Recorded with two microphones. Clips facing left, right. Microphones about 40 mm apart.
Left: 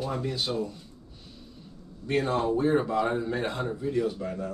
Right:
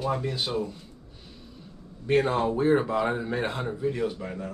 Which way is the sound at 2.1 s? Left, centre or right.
Centre.